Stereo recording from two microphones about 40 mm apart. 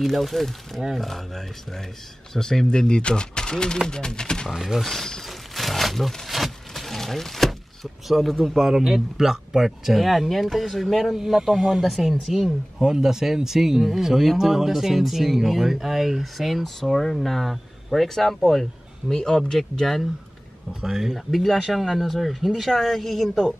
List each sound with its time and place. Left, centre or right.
0.0 s speech: centre
4.5 s speech: centre
4.8 s a sound: centre
8.1 s speech: centre
8.5 s speech: centre
11.1 s speech: centre
11.8 s speech: centre
20.8 s speech: centre
21.3 s speech: centre